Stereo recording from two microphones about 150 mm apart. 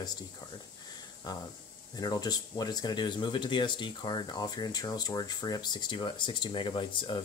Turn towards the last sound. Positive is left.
turn(degrees=30)  # may be behind; listen again after turning